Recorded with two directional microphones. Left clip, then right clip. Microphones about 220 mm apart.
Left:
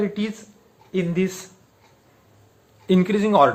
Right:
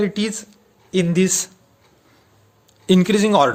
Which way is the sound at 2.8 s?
45° right (ahead or behind).